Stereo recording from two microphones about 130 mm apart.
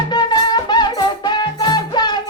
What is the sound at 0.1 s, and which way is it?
Music, 35° left (ahead or behind).